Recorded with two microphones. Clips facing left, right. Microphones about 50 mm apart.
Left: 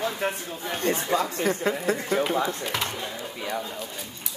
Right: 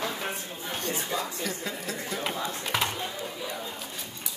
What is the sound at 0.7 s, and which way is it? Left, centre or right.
Speech, left.